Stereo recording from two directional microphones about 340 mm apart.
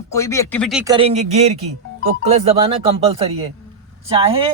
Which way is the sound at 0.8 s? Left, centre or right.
Centre.